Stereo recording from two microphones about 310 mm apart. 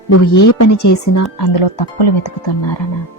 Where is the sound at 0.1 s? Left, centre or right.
Left.